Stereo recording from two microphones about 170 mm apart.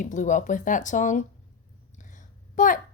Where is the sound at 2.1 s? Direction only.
50° left (ahead or behind).